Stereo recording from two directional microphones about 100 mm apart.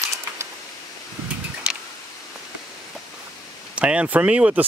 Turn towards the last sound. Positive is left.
turn(degrees=-15)  # may be behind; listen again after turning